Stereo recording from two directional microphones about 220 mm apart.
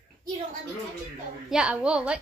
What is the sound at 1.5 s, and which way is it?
Speech, 5° right (ahead or behind).